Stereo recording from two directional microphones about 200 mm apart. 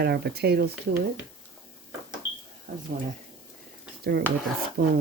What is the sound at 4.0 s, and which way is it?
Speech, 55° right (ahead or behind).